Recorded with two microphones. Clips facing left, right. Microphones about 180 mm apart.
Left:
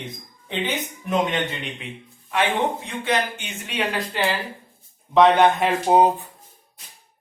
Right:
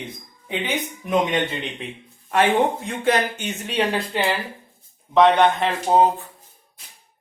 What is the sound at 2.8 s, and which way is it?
Speech, 45° right (ahead or behind).